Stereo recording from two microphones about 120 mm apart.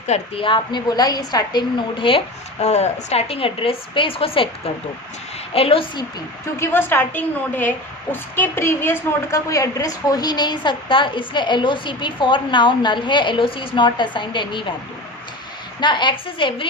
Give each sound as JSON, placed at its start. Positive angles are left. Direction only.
{"t": 0.1, "sound": "a woman's voice", "side_deg": 50}
{"t": 2.6, "sound": "a woman's voice", "side_deg": 65}
{"t": 6.6, "sound": "a woman's voice", "side_deg": 15}
{"t": 15.8, "sound": "a woman's voice", "side_deg": 40}